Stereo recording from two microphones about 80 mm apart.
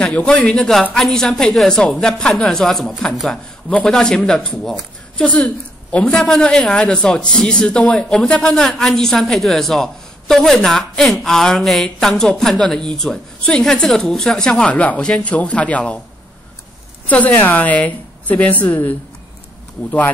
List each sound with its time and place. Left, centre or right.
0.0 s a man's voice: centre
0.9 s a man's voice: centre
17.1 s a woman's voice: left